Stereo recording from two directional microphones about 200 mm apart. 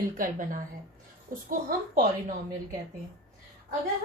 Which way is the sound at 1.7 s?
40° right (ahead or behind).